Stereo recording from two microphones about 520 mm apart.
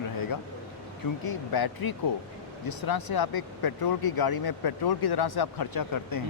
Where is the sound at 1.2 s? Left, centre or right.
Left.